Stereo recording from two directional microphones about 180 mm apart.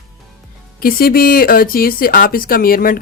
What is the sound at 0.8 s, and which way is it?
Speech, 55° left (ahead or behind).